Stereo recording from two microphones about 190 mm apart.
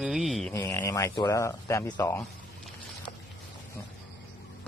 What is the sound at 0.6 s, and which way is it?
Speech, 15° left (ahead or behind).